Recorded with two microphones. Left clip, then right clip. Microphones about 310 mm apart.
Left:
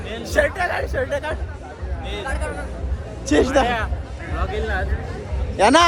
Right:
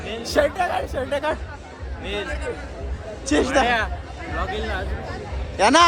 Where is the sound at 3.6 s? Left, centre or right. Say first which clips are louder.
Right 2 dB; right.